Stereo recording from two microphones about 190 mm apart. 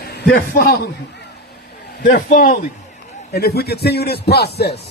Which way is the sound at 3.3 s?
55° left (ahead or behind).